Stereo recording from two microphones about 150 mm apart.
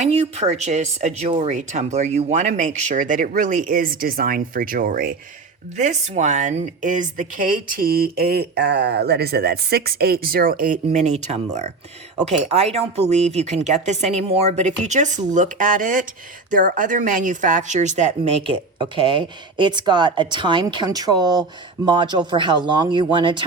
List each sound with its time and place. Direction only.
0.0 s speech: 45° right (ahead or behind); by 5.1 s 70° right (ahead or behind)
5.7 s a woman's voice: 50° right (ahead or behind)
18.4 s speech: 35° right (ahead or behind)